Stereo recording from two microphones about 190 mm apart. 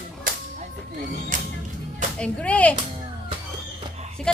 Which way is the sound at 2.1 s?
5° left (ahead or behind).